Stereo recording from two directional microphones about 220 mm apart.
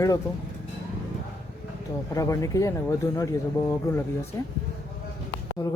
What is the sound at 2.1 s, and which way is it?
Speech, 15° left (ahead or behind).